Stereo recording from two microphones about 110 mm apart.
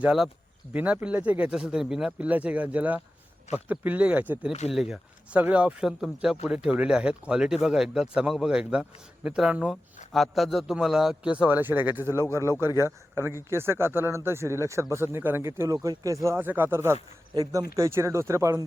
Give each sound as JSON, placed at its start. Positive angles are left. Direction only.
{"t": 0.0, "sound": "speech", "side_deg": -5}
{"t": 17.3, "sound": "speech", "side_deg": -35}